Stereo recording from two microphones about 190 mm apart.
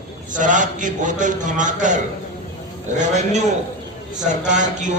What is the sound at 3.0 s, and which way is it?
Speech, 40° right (ahead or behind).